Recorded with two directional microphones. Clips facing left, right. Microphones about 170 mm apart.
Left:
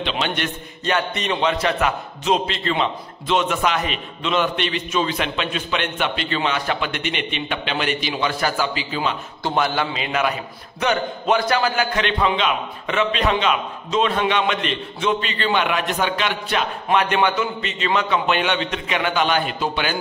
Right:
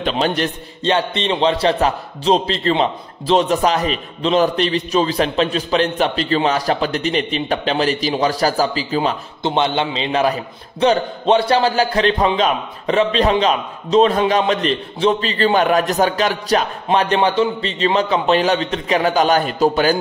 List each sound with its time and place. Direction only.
0.0 s a man's voice: 35° right (ahead or behind)
9.4 s a man's voice: 25° right (ahead or behind); by 20.0 s 40° right (ahead or behind)